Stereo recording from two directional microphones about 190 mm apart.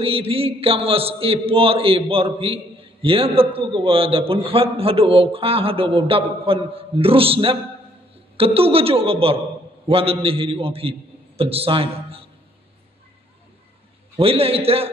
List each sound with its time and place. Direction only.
0.0 s a man's voice: 30° right (ahead or behind)
14.1 s a woman's voice: 30° right (ahead or behind)